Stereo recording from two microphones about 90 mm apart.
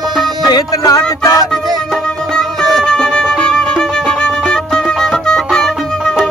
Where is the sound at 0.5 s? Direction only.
45° left (ahead or behind).